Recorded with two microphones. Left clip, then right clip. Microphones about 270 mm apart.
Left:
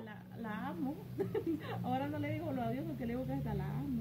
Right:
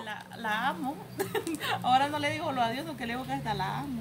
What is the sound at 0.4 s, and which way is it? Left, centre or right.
A woman's voice, centre.